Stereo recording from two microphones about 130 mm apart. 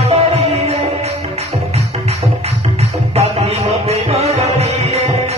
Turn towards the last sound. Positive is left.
turn(degrees=-55)  # may be behind; listen again after turning